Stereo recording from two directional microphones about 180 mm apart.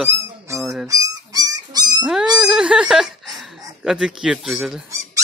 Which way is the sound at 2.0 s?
5° right (ahead or behind).